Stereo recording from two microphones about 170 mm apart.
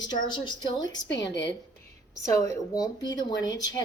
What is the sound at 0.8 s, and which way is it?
Speech, 90° left.